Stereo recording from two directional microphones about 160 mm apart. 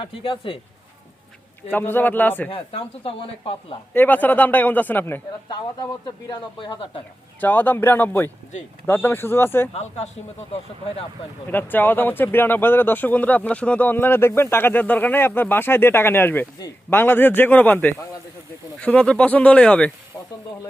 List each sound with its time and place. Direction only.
0.0 s speech: 30° left (ahead or behind)
1.7 s speech: 10° left (ahead or behind)
2.5 s speech: 35° left (ahead or behind)
3.9 s speech: 10° left (ahead or behind)
5.8 s speech: 30° left (ahead or behind)
7.4 s speech: 10° left (ahead or behind)
11.4 s speech: 10° left (ahead or behind)
20.1 s a sound: 5° left (ahead or behind)